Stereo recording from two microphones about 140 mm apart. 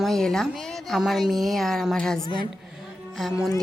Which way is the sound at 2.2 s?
35° left (ahead or behind).